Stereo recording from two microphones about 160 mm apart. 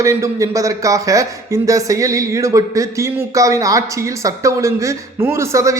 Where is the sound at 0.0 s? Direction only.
20° right (ahead or behind).